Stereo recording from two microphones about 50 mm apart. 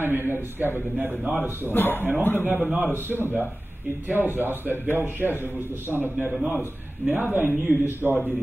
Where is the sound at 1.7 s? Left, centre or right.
Left.